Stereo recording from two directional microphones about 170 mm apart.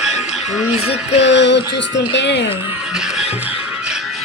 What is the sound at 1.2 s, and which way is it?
Speech, 90° left.